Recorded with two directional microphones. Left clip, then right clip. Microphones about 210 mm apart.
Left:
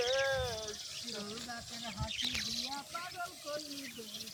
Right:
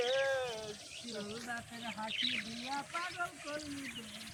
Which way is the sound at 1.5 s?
55° left (ahead or behind).